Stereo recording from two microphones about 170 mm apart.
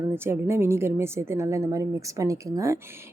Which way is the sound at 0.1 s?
15° right (ahead or behind).